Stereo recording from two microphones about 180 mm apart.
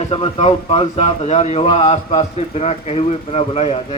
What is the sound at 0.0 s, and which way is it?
Speech, 30° left (ahead or behind).